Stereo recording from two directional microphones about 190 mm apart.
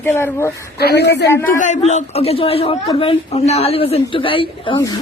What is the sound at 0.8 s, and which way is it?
Speech, 60° left (ahead or behind).